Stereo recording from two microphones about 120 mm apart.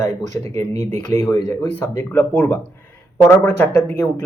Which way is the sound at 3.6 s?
15° left (ahead or behind).